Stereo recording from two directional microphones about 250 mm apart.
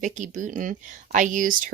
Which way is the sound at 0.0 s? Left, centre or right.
Right.